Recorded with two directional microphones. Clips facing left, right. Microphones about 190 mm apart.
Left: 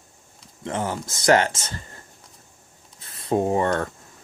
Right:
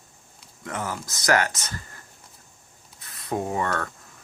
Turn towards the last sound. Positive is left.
turn(degrees=25)  # may be behind; listen again after turning